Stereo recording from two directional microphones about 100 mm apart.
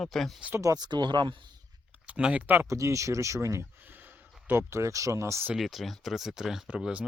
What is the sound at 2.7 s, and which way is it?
Speech, 30° right (ahead or behind).